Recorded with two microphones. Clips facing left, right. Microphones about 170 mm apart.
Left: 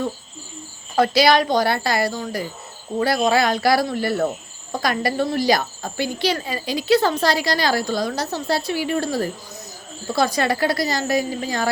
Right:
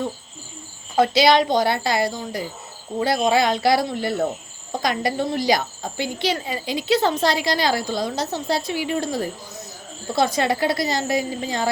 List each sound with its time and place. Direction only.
0.9 s speech: 20° right (ahead or behind)